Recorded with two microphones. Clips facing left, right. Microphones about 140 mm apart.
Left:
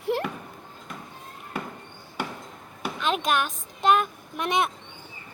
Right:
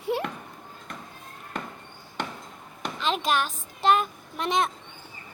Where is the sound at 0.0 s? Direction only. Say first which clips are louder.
Left 1 dB; centre (ahead or behind).